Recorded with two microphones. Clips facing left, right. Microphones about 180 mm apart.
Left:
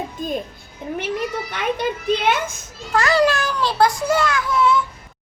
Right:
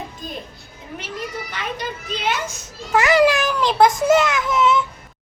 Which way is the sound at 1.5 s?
55° left (ahead or behind).